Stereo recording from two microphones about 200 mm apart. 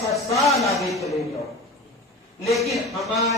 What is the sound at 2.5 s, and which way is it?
Speech, centre (ahead or behind).